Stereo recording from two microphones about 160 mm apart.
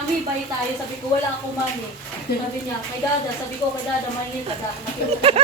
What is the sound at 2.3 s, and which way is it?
Speech, 90° left.